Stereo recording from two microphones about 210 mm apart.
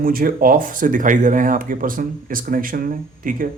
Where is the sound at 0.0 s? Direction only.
45° right (ahead or behind).